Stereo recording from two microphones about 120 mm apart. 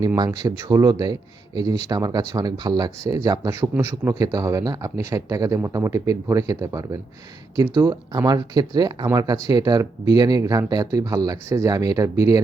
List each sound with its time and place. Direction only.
0.3 s speech: 30° right (ahead or behind)